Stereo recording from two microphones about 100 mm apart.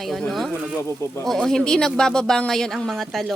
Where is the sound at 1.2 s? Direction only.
5° left (ahead or behind).